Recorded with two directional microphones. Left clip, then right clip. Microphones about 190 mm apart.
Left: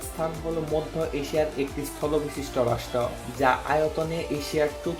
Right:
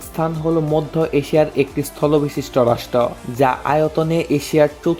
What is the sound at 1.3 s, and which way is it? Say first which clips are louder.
Speech: right 10 dB; 55° right (ahead or behind).